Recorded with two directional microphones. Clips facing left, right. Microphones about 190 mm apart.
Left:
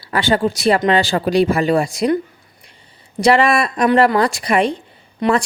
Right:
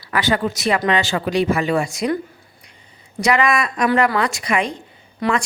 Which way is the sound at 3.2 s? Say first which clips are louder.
Left 4 dB; 30° left (ahead or behind).